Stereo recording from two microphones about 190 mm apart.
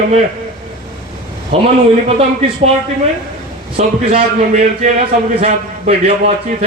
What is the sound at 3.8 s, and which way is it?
Speech, 30° right (ahead or behind).